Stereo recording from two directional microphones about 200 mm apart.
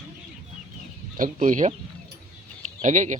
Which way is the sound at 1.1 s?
40° right (ahead or behind).